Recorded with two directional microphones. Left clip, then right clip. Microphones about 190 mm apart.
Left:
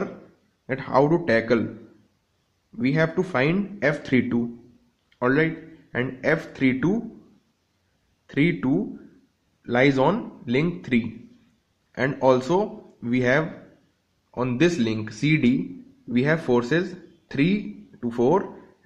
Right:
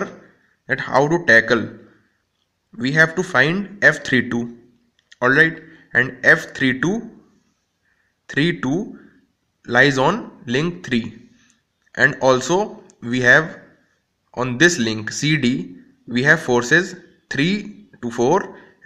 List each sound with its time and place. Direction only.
0.7 s speech: 10° right (ahead or behind)
2.8 s speech: 10° right (ahead or behind)
8.3 s speech: 15° right (ahead or behind)